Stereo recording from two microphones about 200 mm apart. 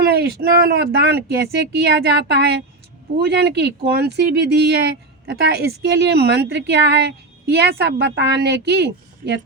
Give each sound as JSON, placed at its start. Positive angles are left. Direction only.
{"t": 0.0, "sound": "a woman's voice", "side_deg": -50}